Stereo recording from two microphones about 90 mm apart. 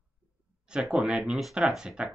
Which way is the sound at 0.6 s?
10° right (ahead or behind).